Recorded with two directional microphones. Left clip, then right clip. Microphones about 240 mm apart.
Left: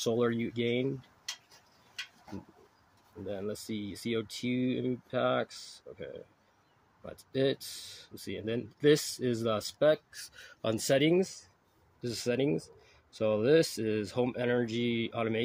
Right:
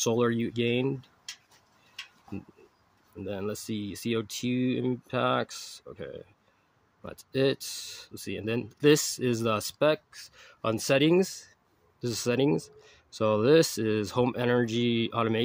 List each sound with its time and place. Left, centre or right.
0.0 s speech: right
3.3 s speech: right
10.1 s speech: centre; by 15.4 s right